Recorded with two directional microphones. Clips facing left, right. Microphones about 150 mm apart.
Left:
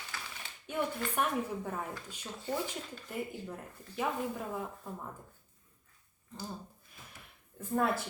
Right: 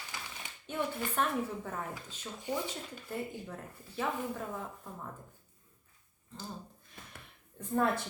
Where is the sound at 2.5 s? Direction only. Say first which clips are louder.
Even; 10° right (ahead or behind).